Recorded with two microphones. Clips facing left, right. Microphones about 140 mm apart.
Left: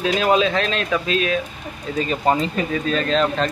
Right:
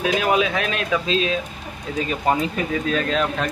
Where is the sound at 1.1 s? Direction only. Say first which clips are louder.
Even; 25° right (ahead or behind).